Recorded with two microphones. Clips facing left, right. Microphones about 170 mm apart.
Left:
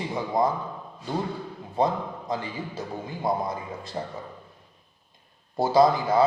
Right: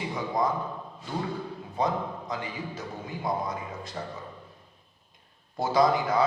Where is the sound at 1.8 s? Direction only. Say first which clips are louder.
Left 3 dB; 30° left (ahead or behind).